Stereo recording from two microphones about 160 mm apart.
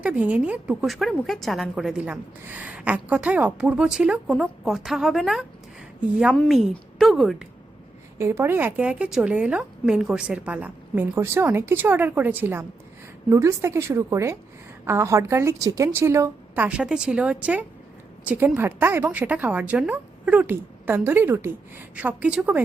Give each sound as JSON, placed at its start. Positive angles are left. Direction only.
{"t": 0.0, "sound": "a woman's voice", "side_deg": -10}
{"t": 8.2, "sound": "a woman's voice", "side_deg": -15}